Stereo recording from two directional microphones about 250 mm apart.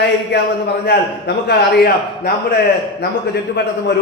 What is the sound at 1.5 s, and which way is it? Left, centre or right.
Speech, left.